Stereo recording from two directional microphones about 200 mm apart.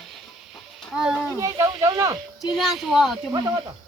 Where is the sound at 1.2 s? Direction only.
15° right (ahead or behind).